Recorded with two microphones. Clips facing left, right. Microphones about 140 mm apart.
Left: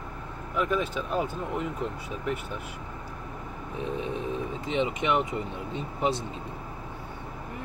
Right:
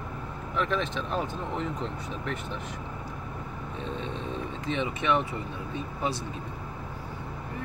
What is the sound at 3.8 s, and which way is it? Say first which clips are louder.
Speech: left 4 dB; 10° left (ahead or behind).